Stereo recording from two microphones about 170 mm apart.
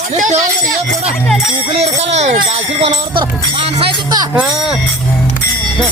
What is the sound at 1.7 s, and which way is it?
Speech, 40° right (ahead or behind).